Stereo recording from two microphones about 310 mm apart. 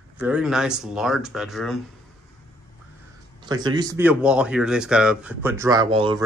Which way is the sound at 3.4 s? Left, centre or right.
Centre.